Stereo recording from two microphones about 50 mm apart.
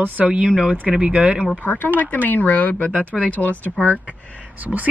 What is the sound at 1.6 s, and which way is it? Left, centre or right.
Speech, left.